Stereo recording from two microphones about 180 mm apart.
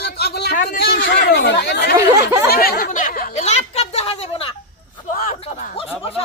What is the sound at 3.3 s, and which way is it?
Speech, 35° left (ahead or behind).